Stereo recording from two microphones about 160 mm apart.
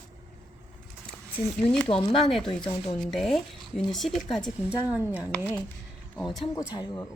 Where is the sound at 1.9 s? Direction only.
35° left (ahead or behind).